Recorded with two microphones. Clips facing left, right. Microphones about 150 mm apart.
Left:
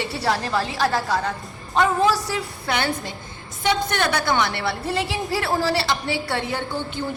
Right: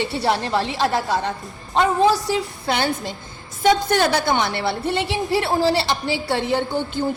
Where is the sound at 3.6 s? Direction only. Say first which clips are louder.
Right 5 dB; 45° right (ahead or behind).